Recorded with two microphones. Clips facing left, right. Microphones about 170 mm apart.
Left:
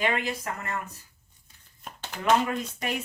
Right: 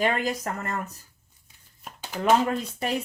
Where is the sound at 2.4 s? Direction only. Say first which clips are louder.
Right 3 dB; 35° right (ahead or behind).